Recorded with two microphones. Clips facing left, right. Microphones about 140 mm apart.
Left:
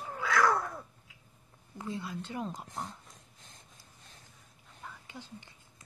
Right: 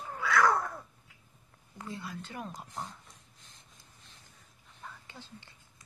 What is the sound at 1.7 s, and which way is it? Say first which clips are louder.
Speech: left 3 dB; 15° left (ahead or behind).